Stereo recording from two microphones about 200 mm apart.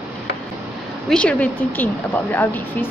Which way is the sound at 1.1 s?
5° left (ahead or behind).